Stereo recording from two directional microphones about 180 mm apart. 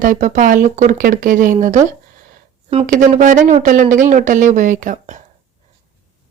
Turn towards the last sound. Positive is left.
turn(degrees=-45)  # may be behind; listen again after turning